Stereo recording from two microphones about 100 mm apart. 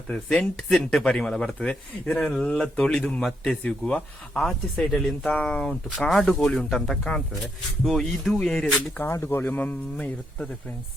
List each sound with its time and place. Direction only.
0.1 s speech: 5° left (ahead or behind)
9.0 s speech: 25° left (ahead or behind)